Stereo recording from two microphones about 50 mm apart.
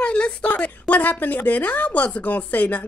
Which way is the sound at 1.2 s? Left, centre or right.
Left.